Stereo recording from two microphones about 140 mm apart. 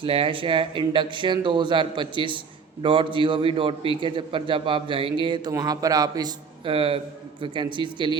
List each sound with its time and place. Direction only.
0.0 s a man's voice: 40° right (ahead or behind)
6.7 s a man's voice: 40° right (ahead or behind)